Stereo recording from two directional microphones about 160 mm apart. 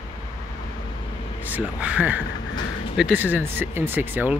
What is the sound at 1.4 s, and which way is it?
Speech, 10° right (ahead or behind).